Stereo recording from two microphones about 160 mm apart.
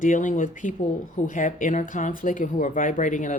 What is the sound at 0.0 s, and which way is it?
A woman's voice, 55° left (ahead or behind).